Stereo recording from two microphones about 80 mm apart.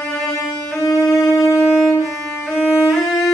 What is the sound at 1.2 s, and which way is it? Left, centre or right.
Wind instrument, left.